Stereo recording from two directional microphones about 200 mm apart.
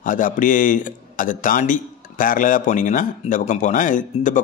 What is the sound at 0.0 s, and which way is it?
Speech, 40° left (ahead or behind).